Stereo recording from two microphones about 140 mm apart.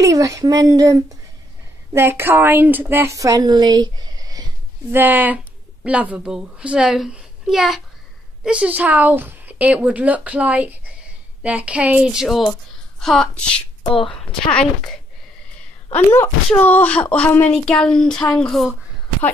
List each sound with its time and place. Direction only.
0.0 s a woman's voice: 25° right (ahead or behind)
4.9 s a child's voice: 15° right (ahead or behind); by 14.7 s 5° left (ahead or behind)
15.9 s a child's voice: 15° left (ahead or behind)